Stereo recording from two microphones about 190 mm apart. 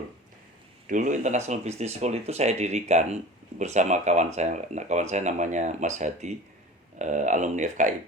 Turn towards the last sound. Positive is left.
turn(degrees=-40)  # may be behind; listen again after turning